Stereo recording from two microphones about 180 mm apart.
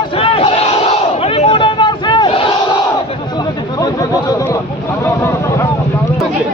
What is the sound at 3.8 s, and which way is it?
Chatter, 20° left (ahead or behind).